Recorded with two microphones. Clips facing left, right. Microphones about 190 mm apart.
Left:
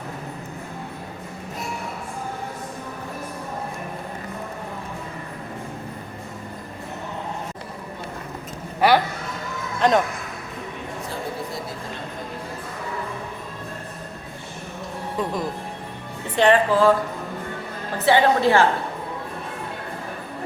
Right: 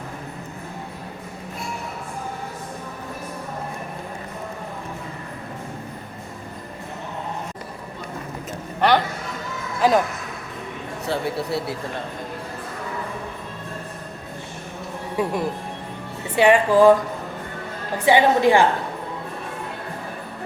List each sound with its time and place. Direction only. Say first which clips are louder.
8.8 s a sound: left 1 dB; 10° left (ahead or behind)
9.8 s speech: right 1 dB; 5° right (ahead or behind)
11.0 s a man's voice: right 7 dB; 70° right (ahead or behind)
15.2 s a woman's voice: right 3 dB; 10° right (ahead or behind)
17.9 s a woman's voice: right 1 dB; 15° right (ahead or behind)